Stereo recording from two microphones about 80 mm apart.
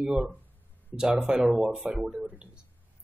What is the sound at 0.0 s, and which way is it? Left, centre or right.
Speech, centre.